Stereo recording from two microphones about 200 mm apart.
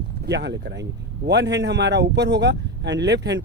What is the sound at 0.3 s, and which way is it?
Speech, 60° right (ahead or behind).